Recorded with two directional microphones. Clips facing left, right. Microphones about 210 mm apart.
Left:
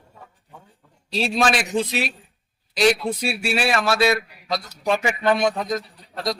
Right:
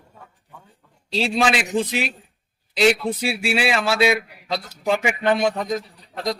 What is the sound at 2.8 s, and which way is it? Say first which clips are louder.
Speech: right 1 dB; 25° right (ahead or behind).